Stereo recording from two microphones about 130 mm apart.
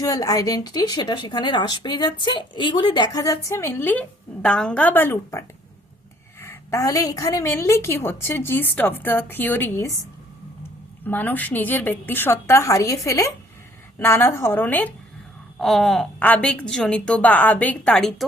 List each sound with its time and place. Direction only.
0.0 s a woman's voice: 25° left (ahead or behind)
11.0 s a woman's voice: 15° left (ahead or behind)
15.6 s a sound: centre (ahead or behind)
16.2 s a woman's voice: 10° left (ahead or behind)